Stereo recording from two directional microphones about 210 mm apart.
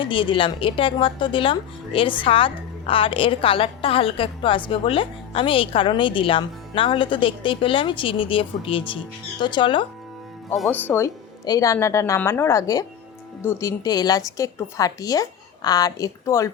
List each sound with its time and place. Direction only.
0.0 s a woman's voice: 25° left (ahead or behind)
10.5 s a woman's voice: 5° left (ahead or behind)